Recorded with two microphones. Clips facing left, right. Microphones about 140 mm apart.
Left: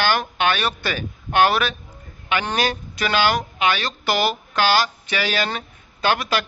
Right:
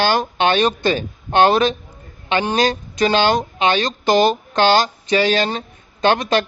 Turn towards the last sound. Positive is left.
turn(degrees=-25)  # may be behind; listen again after turning